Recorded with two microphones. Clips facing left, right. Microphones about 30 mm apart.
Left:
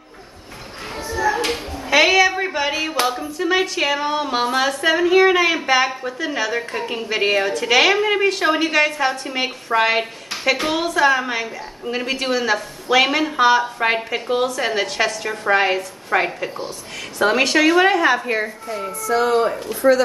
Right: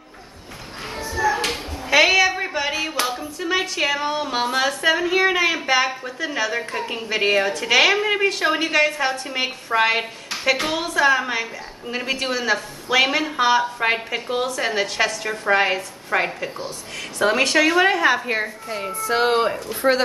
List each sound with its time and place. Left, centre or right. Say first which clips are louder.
1.1 s a woman's voice: left 1 dB; centre
18.7 s speech: left 2 dB; right